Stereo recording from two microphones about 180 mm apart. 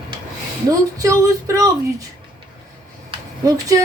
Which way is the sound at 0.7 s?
20° right (ahead or behind).